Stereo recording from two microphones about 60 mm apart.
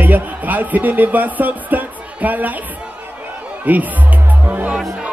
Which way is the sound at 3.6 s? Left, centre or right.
Right.